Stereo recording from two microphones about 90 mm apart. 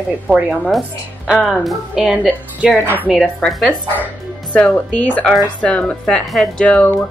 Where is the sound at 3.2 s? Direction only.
Centre (ahead or behind).